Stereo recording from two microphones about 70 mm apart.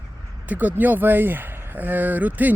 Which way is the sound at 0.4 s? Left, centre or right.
Right.